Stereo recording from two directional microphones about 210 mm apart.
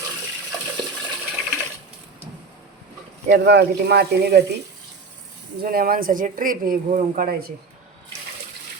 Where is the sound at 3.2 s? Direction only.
55° right (ahead or behind).